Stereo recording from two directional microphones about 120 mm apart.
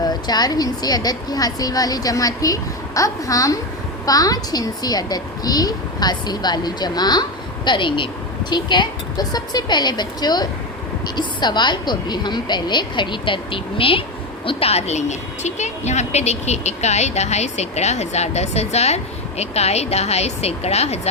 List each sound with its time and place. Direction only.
0.0 s speech: 35° left (ahead or behind); by 21.1 s 60° left (ahead or behind)